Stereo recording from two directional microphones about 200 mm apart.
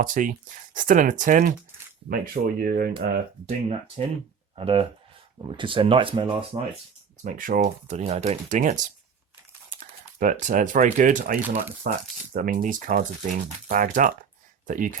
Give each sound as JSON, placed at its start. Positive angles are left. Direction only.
{"t": 0.0, "sound": "speech", "side_deg": -40}
{"t": 3.4, "sound": "speech", "side_deg": -30}
{"t": 7.3, "sound": "speech", "side_deg": -40}
{"t": 9.8, "sound": "a sound", "side_deg": -40}
{"t": 10.4, "sound": "speech", "side_deg": -40}